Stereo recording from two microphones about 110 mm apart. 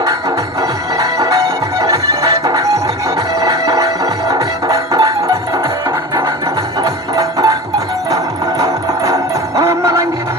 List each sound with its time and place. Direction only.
0.9 s music: 30° right (ahead or behind)
6.8 s music: 30° right (ahead or behind)